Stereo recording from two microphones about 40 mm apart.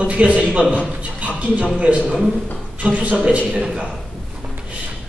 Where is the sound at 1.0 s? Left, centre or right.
Right.